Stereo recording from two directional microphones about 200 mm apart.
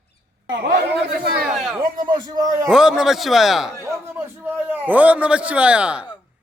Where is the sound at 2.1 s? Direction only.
20° right (ahead or behind).